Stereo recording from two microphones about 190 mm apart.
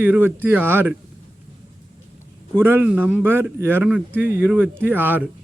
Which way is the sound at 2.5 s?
10° right (ahead or behind).